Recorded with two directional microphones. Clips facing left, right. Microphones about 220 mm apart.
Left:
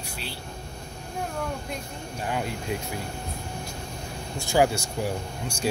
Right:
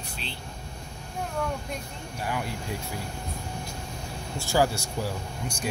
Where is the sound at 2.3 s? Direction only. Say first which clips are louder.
Left 3 dB; 20° left (ahead or behind).